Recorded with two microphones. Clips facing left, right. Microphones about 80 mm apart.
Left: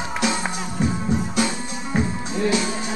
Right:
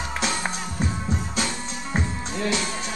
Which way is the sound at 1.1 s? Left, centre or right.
Centre.